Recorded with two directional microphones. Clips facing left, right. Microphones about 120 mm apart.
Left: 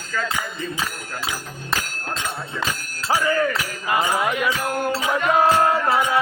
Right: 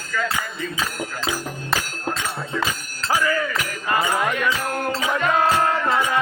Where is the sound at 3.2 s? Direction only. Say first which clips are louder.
Left 1 dB; 25° left (ahead or behind).